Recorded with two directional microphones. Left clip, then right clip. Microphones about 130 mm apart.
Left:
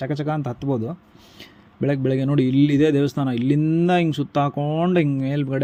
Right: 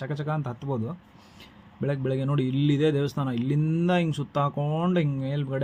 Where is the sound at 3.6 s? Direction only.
25° left (ahead or behind).